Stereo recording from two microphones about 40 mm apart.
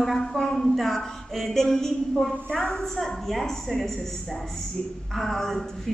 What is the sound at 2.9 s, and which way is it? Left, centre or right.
Speech, centre.